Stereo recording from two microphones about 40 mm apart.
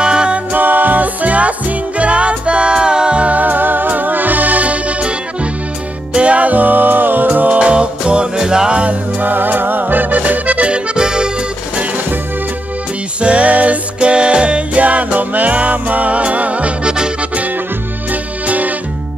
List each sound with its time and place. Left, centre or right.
0.0 s music: right
0.5 s music: right
3.3 s music: right
7.5 s music: right
9.2 s accordion: right
11.0 s music: centre
13.2 s music: right
18.1 s music: right